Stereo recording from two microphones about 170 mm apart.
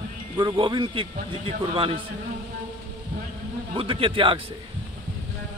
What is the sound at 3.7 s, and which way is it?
Speech, 30° right (ahead or behind).